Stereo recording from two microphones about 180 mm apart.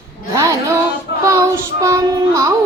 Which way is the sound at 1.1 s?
65° left (ahead or behind).